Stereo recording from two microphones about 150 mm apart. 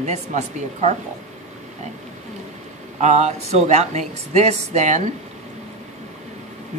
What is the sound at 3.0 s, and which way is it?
Speech, 50° right (ahead or behind).